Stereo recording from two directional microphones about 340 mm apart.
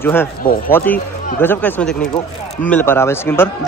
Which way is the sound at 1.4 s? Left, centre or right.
Centre.